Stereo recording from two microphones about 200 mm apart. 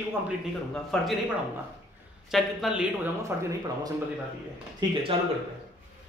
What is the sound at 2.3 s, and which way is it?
Speech, centre (ahead or behind).